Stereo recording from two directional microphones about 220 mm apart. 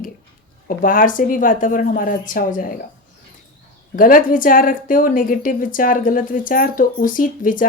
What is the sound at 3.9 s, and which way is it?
Speech, 40° left (ahead or behind).